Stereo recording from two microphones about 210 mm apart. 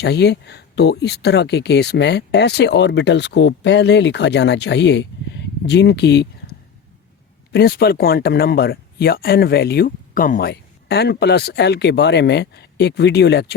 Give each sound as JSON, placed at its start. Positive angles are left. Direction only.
{"t": 0.0, "sound": "speech", "side_deg": 55}